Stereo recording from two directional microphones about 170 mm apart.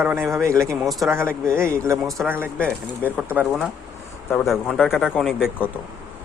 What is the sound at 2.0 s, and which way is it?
Speech, centre (ahead or behind).